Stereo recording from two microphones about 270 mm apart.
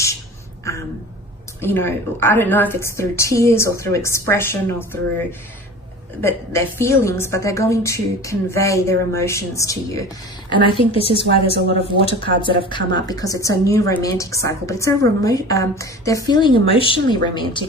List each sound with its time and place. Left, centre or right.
1.6 s a woman's voice: centre
6.2 s a woman's voice: centre